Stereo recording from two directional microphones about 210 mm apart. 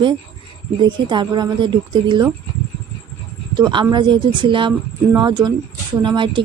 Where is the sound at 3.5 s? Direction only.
20° right (ahead or behind).